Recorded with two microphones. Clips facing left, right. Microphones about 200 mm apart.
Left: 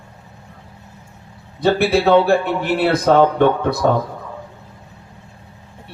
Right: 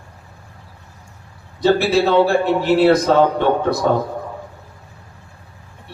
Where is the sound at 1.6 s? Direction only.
55° left (ahead or behind).